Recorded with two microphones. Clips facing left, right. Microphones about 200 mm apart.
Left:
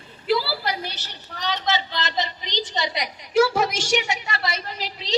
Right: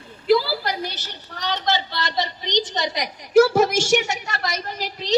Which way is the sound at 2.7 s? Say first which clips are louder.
Right 2 dB; 45° right (ahead or behind).